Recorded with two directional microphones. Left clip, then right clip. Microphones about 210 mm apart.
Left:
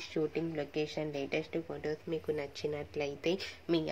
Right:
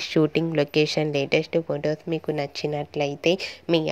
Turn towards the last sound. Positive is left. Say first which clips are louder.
# right 10 dB
turn(degrees=-35)  # may be behind; listen again after turning